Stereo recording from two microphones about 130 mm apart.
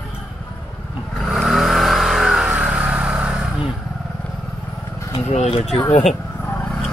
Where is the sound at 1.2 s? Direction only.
5° right (ahead or behind).